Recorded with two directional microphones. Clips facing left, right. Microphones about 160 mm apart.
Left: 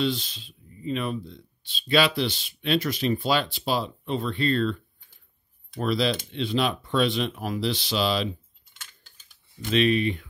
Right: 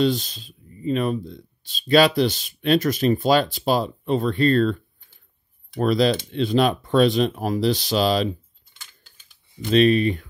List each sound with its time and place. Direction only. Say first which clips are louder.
0.0 s speech: right 6 dB; 45° right (ahead or behind)
5.8 s speech: right 6 dB; 45° right (ahead or behind)
9.7 s speech: right 5 dB; 40° right (ahead or behind)